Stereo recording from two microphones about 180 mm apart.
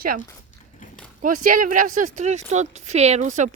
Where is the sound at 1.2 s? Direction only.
50° right (ahead or behind).